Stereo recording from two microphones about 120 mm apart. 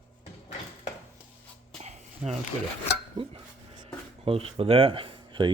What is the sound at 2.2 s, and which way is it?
Speech, 10° right (ahead or behind).